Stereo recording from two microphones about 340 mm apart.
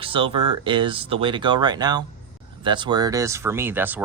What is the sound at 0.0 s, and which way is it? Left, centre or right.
Speech, centre.